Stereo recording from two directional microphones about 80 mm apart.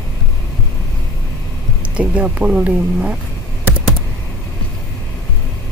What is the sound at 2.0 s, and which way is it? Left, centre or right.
Speech, centre.